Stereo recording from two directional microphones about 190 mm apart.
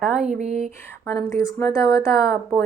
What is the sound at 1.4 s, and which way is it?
Speech, 15° left (ahead or behind).